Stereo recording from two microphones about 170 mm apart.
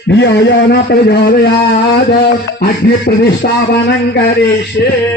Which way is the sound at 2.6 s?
70° left (ahead or behind).